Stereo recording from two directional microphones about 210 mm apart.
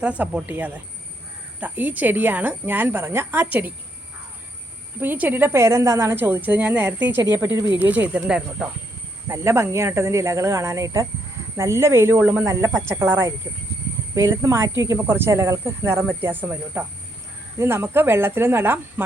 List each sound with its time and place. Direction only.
0.0 s a woman's voice: 5° right (ahead or behind)
4.9 s a woman's voice: 10° right (ahead or behind)